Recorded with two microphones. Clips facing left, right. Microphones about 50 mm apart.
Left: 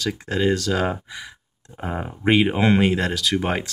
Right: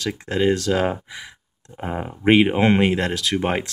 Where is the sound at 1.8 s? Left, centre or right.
Centre.